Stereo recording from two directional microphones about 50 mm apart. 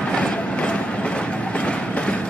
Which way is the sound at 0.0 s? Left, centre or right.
Left.